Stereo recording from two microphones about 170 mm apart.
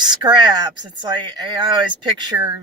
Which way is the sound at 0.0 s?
25° right (ahead or behind).